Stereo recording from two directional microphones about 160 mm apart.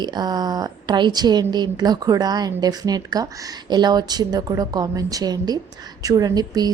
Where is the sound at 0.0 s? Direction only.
25° right (ahead or behind).